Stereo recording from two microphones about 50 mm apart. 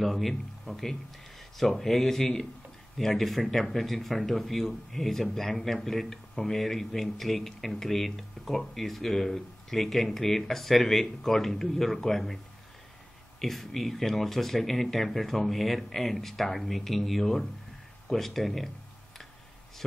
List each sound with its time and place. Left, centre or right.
0.0 s a man's voice: centre
13.4 s a man's voice: centre